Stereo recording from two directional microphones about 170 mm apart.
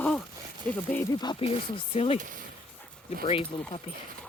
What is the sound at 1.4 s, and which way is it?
Speech, 35° left (ahead or behind).